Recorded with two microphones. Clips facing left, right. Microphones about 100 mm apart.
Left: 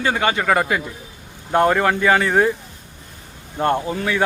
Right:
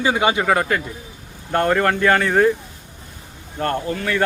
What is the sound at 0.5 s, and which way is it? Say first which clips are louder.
Speech: even; 5° left (ahead or behind).